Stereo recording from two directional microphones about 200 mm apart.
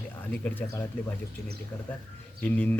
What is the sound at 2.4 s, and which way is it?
Speech, 10° left (ahead or behind).